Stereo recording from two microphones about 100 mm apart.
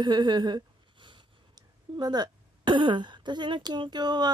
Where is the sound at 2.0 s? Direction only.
45° right (ahead or behind).